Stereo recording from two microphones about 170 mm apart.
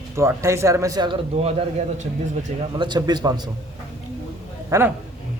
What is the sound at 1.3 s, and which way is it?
Speech, 40° right (ahead or behind).